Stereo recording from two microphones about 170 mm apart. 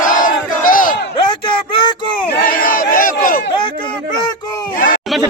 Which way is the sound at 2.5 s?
55° left (ahead or behind).